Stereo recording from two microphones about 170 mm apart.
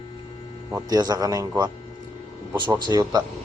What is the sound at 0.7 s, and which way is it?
Speech, 20° right (ahead or behind).